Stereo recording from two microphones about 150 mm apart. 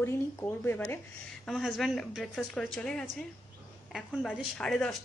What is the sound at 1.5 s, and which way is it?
A woman's voice, centre (ahead or behind).